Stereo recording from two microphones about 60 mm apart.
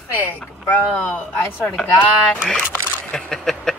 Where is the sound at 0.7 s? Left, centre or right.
Left.